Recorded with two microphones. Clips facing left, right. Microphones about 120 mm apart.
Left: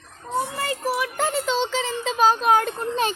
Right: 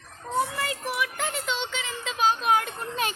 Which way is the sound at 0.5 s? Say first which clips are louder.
Left 5 dB; 35° left (ahead or behind).